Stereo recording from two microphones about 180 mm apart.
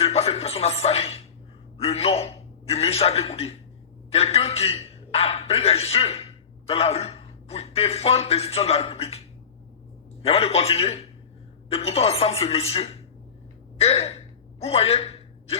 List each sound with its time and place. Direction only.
0.0 s music: 35° left (ahead or behind)
1.8 s a sound: 35° left (ahead or behind)
4.1 s a man's voice: 35° left (ahead or behind)
10.2 s a man's voice: 35° left (ahead or behind)
13.7 s gasp: 35° left (ahead or behind)